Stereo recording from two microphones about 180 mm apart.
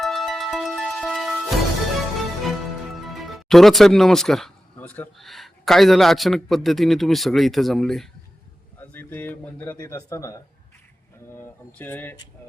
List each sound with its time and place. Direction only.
0.0 s music: centre (ahead or behind)
3.1 s speech: centre (ahead or behind)